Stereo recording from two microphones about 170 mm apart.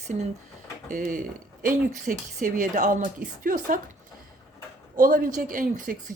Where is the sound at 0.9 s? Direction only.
50° right (ahead or behind).